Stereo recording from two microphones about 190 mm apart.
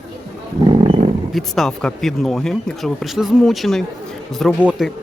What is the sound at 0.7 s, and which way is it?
Roaring cats, 30° right (ahead or behind).